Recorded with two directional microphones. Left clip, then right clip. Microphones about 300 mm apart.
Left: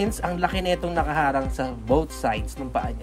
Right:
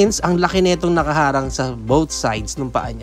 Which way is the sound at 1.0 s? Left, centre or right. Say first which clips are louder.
Right 6 dB; left.